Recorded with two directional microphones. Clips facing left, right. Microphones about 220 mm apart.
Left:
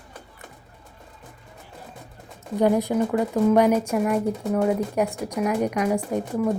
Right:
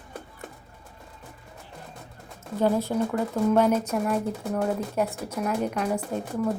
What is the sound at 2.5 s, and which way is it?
A woman's voice, 15° left (ahead or behind).